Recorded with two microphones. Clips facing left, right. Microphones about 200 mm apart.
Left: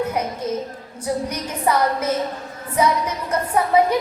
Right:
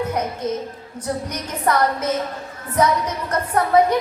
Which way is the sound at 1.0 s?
10° left (ahead or behind).